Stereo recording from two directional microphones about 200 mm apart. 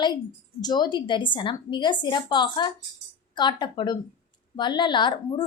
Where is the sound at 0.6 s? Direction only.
20° left (ahead or behind).